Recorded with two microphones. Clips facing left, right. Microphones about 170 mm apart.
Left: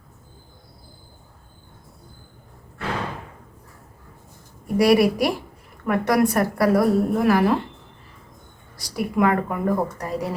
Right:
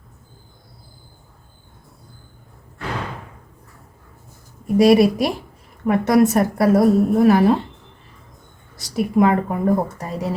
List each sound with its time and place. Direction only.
4.6 s a woman's voice: 25° right (ahead or behind)
8.7 s a woman's voice: 25° right (ahead or behind)